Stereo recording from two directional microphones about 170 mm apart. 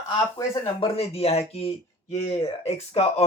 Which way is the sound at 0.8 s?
35° left (ahead or behind).